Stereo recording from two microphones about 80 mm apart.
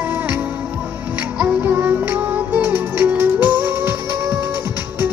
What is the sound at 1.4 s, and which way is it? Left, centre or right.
Music, centre.